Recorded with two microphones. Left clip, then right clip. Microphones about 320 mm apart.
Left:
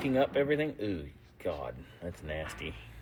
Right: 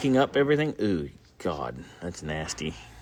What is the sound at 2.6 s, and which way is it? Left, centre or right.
Speech, right.